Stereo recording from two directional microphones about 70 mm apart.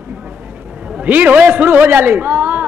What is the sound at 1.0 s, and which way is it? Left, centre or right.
A man's voice, right.